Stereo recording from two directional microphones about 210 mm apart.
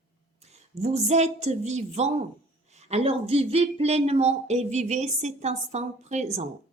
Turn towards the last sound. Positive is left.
turn(degrees=-35)  # may be behind; listen again after turning